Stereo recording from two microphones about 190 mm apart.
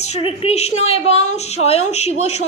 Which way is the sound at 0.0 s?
30° left (ahead or behind).